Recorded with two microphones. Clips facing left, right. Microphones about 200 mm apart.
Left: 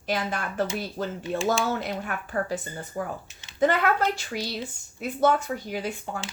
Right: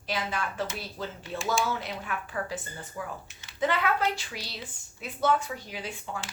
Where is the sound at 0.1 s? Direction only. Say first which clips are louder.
Left 3 dB; 50° left (ahead or behind).